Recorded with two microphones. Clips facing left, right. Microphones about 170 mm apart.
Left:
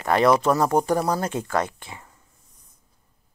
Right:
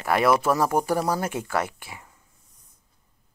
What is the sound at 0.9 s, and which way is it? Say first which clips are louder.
Speech: left 2 dB; 15° left (ahead or behind).